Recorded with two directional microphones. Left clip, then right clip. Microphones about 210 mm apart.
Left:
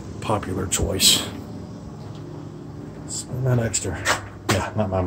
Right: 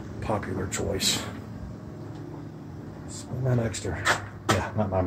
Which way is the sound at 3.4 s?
5° left (ahead or behind).